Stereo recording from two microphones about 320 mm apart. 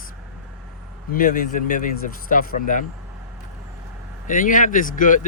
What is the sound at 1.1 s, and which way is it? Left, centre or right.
Speech, left.